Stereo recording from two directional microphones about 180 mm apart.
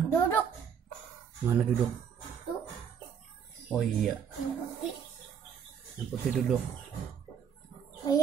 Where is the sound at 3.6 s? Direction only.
Centre (ahead or behind).